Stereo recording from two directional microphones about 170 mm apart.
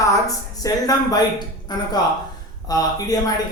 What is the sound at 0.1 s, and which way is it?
Speech, 20° left (ahead or behind).